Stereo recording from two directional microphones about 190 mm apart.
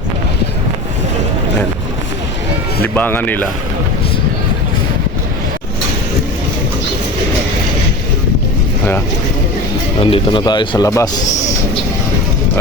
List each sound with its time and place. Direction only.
2.8 s speech: 10° left (ahead or behind)
10.0 s speech: 25° left (ahead or behind)